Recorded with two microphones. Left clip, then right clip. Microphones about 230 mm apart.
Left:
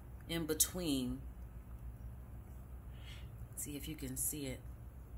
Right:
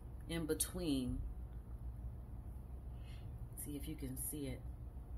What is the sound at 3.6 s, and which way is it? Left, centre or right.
Speech, centre.